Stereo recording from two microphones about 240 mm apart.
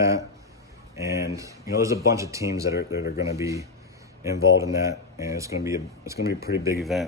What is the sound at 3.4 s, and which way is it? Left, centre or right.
Speech, centre.